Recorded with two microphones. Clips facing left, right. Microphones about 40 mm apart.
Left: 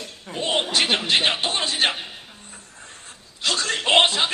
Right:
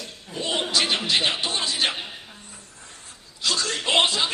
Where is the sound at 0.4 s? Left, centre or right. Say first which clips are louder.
Left 2 dB; left.